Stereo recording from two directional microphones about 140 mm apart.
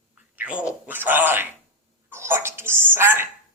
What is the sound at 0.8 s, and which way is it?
Speech, 15° right (ahead or behind).